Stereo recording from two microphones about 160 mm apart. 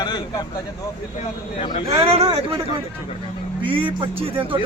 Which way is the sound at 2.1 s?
40° right (ahead or behind).